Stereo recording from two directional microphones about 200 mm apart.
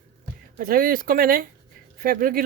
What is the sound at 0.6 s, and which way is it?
Speech, 45° right (ahead or behind).